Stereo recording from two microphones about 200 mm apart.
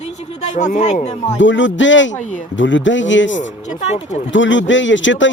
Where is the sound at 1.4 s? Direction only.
70° left (ahead or behind).